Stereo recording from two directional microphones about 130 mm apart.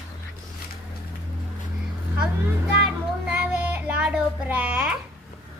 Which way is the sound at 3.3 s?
15° right (ahead or behind).